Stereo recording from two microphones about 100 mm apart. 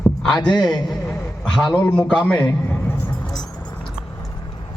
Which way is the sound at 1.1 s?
5° left (ahead or behind).